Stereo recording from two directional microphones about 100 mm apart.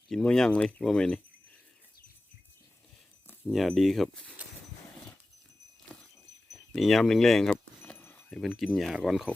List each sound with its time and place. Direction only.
0.2 s speech: 5° left (ahead or behind)
3.4 s speech: centre (ahead or behind)
5.9 s dog: 5° left (ahead or behind)
6.5 s speech: centre (ahead or behind)
7.9 s a sound: 20° left (ahead or behind)
8.3 s speech: centre (ahead or behind)